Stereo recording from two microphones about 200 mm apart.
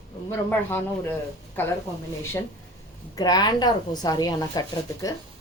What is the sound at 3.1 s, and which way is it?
A woman's voice, 20° left (ahead or behind).